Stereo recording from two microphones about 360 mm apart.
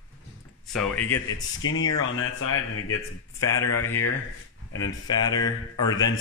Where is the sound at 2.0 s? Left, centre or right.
Left.